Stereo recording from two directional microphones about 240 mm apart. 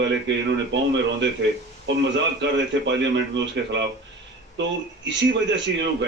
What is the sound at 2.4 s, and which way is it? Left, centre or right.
Speech, right.